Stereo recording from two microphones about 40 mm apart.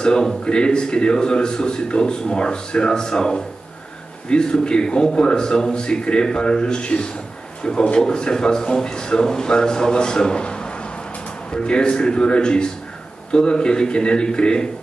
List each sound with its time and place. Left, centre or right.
0.0 s a man's voice: left